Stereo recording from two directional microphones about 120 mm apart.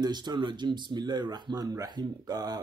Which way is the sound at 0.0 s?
35° right (ahead or behind).